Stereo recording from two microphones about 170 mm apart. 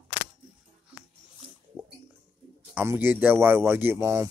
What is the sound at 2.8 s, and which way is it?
Speech, 10° right (ahead or behind).